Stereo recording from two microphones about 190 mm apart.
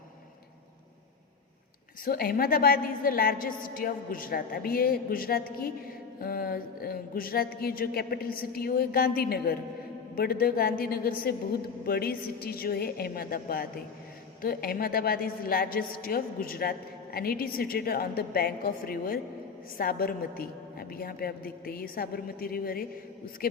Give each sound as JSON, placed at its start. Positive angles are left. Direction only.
{"t": 2.0, "sound": "a woman's voice", "side_deg": 50}